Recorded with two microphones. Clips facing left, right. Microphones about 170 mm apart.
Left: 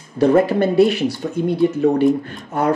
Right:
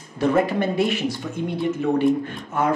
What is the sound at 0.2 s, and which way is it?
Speech, 35° left (ahead or behind).